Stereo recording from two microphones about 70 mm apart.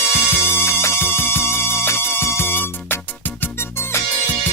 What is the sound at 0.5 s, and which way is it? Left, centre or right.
Music, left.